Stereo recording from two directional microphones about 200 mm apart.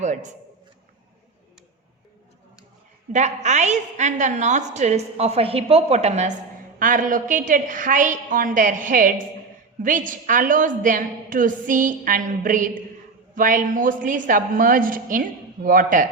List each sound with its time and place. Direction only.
0.0 s a man's voice: 35° right (ahead or behind)
3.1 s a woman's voice: 35° right (ahead or behind)